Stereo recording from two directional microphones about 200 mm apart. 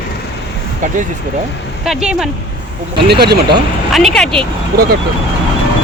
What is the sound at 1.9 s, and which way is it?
Speech, 5° right (ahead or behind).